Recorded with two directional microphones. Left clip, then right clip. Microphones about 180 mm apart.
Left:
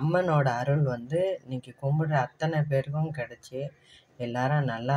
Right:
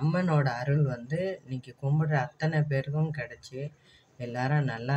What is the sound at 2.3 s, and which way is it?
Speech, 25° left (ahead or behind).